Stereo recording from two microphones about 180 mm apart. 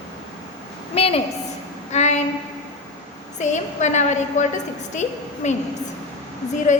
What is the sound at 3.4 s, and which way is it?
A woman's voice, 40° left (ahead or behind).